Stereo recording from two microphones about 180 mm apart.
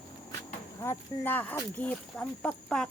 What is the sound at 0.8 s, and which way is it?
Speech, 10° left (ahead or behind).